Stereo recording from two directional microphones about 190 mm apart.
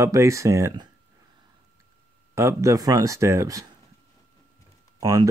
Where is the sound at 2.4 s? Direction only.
15° right (ahead or behind).